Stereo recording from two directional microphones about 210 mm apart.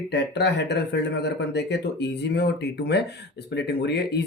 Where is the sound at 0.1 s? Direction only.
55° left (ahead or behind).